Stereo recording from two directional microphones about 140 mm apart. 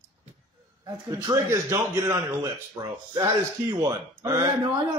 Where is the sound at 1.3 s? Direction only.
20° right (ahead or behind).